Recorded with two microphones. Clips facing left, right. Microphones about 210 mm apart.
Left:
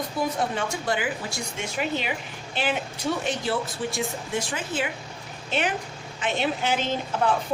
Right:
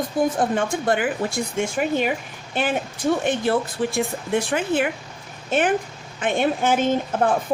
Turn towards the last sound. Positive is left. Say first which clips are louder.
# right 5 dB
turn(degrees=-50)  # may be behind; listen again after turning